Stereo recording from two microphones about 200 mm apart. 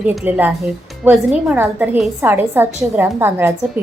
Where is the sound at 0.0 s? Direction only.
5° right (ahead or behind).